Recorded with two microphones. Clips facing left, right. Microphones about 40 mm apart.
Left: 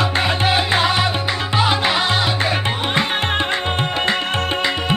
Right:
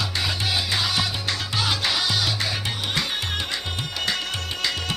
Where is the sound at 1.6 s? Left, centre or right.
Left.